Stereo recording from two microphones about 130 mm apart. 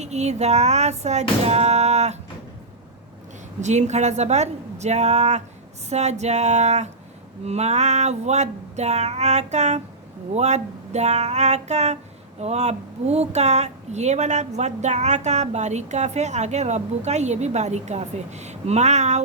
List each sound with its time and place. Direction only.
0.0 s a woman's voice: 60° right (ahead or behind)
3.6 s a woman's voice: 65° right (ahead or behind)